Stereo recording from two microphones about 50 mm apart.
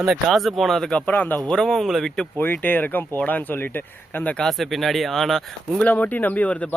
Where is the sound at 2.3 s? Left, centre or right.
Left.